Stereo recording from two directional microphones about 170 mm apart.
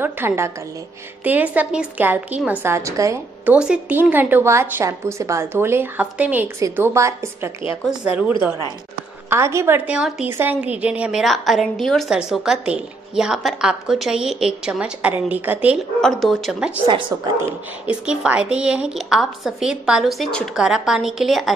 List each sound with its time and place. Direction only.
0.0 s a woman's voice: 15° right (ahead or behind)
3.5 s a woman's voice: 5° right (ahead or behind)
9.3 s a woman's voice: 15° right (ahead or behind)
16.0 s a woman's voice: centre (ahead or behind)
17.1 s speech: 20° right (ahead or behind)
17.8 s a woman's voice: 5° right (ahead or behind)